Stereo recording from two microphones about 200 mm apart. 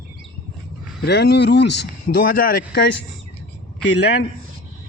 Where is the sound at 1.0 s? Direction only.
55° left (ahead or behind).